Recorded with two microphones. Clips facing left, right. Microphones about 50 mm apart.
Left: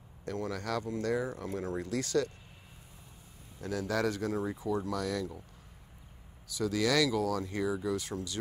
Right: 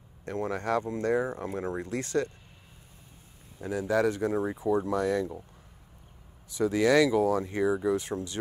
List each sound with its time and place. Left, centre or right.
0.2 s speech: right
3.6 s speech: right
6.5 s speech: right